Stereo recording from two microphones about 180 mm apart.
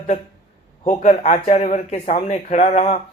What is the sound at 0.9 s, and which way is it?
Speech, 40° left (ahead or behind).